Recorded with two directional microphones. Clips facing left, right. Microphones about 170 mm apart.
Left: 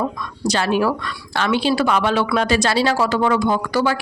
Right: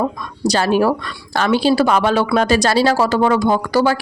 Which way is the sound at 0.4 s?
40° right (ahead or behind).